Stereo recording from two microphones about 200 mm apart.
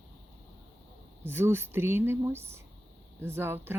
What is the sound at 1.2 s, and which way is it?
Speech, 10° right (ahead or behind).